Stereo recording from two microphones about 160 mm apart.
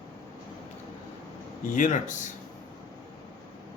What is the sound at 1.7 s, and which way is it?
Speech, 55° left (ahead or behind).